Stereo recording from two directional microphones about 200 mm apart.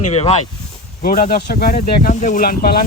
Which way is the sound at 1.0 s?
45° left (ahead or behind).